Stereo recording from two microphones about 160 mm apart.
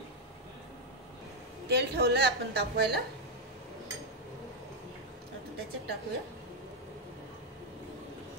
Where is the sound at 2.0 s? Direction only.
80° right.